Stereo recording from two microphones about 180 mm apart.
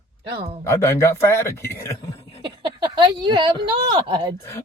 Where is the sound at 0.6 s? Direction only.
15° left (ahead or behind).